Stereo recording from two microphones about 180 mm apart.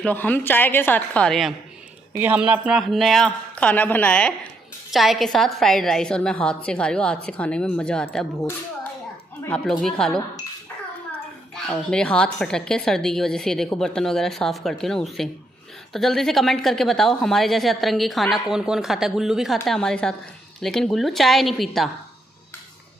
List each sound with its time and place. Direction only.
0.0 s a woman's voice: 10° left (ahead or behind)
2.1 s a woman's voice: 10° right (ahead or behind)
9.5 s a woman's voice: 5° left (ahead or behind)